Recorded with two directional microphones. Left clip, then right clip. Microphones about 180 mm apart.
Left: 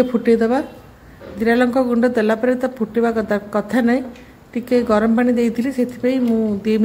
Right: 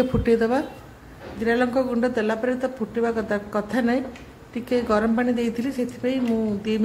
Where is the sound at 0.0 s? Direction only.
15° left (ahead or behind).